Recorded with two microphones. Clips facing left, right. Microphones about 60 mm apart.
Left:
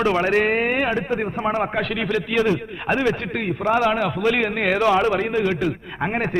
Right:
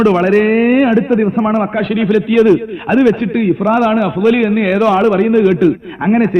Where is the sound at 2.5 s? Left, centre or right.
Right.